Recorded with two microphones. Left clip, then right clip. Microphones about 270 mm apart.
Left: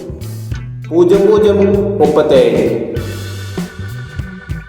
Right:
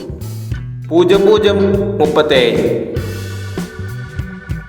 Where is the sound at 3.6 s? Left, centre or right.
Centre.